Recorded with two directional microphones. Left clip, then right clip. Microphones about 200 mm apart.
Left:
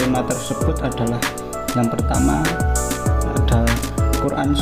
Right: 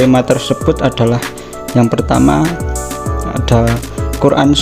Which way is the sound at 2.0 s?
55° right (ahead or behind).